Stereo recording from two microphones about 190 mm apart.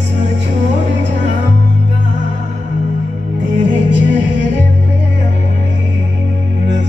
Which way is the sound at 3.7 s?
70° right (ahead or behind).